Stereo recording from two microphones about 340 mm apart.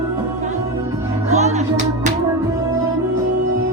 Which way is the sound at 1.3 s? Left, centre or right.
Right.